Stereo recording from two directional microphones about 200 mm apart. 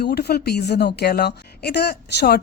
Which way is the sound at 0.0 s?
55° left (ahead or behind).